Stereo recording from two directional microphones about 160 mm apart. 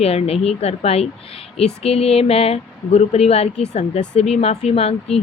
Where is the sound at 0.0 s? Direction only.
40° left (ahead or behind).